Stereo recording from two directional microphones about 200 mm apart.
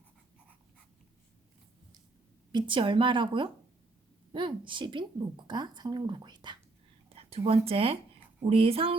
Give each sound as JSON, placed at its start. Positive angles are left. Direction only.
{"t": 2.5, "sound": "speech", "side_deg": -25}